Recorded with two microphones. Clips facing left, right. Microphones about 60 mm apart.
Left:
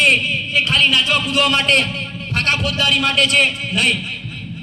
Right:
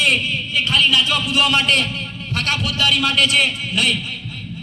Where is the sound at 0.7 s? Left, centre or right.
Left.